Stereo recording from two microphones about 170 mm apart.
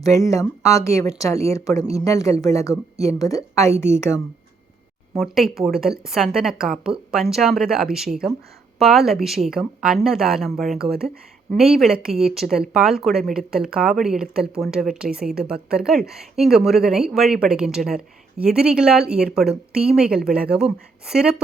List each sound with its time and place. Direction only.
0.0 s speech: 20° left (ahead or behind)
5.1 s speech: centre (ahead or behind)